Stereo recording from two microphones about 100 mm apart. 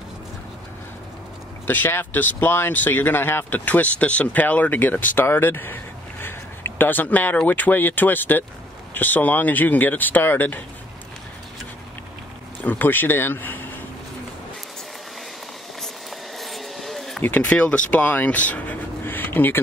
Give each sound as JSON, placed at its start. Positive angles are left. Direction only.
{"t": 1.7, "sound": "speech", "side_deg": 20}
{"t": 12.6, "sound": "a man's voice", "side_deg": 20}
{"t": 15.8, "sound": "a sound", "side_deg": 0}
{"t": 17.2, "sound": "speech", "side_deg": 15}